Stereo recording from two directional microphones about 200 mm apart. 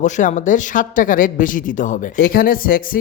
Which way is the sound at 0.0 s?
40° left (ahead or behind).